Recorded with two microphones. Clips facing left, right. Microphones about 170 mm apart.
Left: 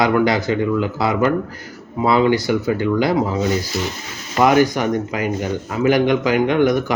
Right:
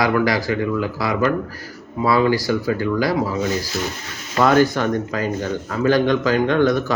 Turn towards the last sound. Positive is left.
turn(degrees=15)  # may be behind; listen again after turning